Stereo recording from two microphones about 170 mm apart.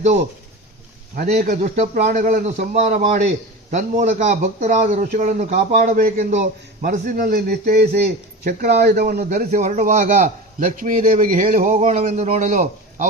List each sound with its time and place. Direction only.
1.1 s a man's voice: 50° right (ahead or behind)
8.4 s speech: 70° right (ahead or behind)
9.5 s a man's voice: 45° right (ahead or behind)